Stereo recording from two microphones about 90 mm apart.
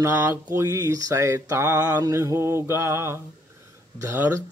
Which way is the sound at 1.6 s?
20° right (ahead or behind).